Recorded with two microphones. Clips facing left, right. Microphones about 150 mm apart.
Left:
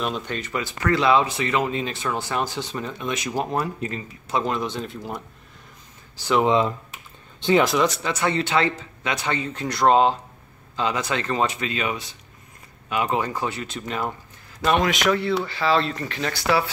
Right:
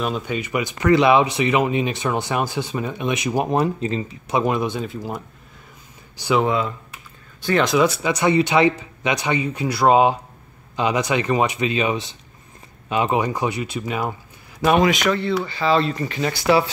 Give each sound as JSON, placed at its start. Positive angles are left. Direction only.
{"t": 0.0, "sound": "speech", "side_deg": -5}
{"t": 6.4, "sound": "speech", "side_deg": 25}
{"t": 7.6, "sound": "speech", "side_deg": -5}
{"t": 14.9, "sound": "speech", "side_deg": 5}